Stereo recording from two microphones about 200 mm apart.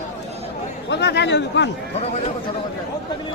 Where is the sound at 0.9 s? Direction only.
55° left (ahead or behind).